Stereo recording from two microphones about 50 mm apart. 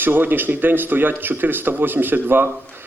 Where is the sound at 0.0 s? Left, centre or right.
Right.